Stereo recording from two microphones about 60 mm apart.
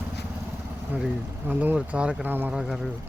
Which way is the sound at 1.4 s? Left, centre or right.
Right.